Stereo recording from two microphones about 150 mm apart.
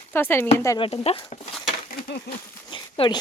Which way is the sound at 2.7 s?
30° left (ahead or behind).